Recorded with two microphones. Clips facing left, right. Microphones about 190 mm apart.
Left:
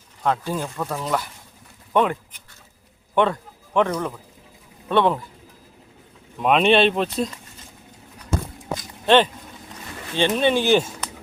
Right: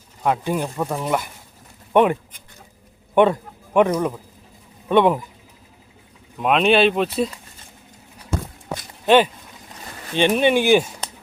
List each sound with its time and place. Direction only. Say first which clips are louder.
0.2 s speech: right 2 dB; 15° right (ahead or behind)
3.2 s a man's voice: right 5 dB; 20° right (ahead or behind)
6.4 s speech: right 1 dB; centre (ahead or behind)
9.0 s speech: right 2 dB; 10° right (ahead or behind)